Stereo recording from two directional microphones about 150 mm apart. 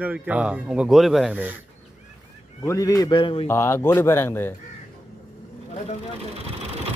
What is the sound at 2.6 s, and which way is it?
Speech, 20° left (ahead or behind).